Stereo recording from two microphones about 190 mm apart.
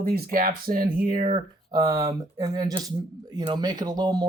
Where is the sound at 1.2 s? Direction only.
30° right (ahead or behind).